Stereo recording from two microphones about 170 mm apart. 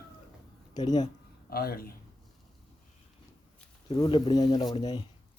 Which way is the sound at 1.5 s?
60° left (ahead or behind).